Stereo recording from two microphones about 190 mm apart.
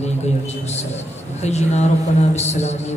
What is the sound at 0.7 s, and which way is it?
A man's voice, 35° left (ahead or behind).